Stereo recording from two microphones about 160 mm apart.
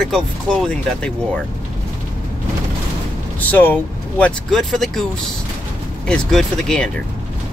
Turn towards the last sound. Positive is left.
turn(degrees=5)  # may be behind; listen again after turning